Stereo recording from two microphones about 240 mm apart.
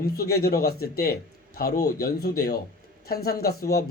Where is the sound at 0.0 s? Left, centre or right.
Left.